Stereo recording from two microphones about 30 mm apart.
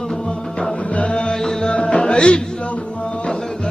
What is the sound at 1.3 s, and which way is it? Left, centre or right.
Music, centre.